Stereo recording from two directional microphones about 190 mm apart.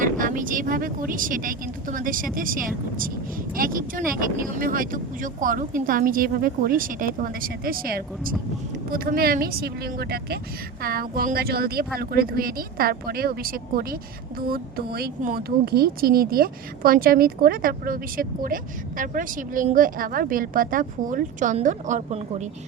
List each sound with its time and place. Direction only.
0.0 s speech: 45° right (ahead or behind)